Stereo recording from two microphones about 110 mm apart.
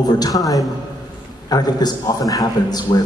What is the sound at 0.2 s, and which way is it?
A man's voice, 35° left (ahead or behind).